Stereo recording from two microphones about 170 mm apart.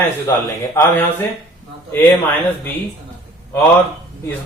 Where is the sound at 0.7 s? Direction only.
15° left (ahead or behind).